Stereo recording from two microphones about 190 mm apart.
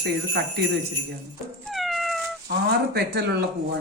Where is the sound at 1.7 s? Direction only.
Centre (ahead or behind).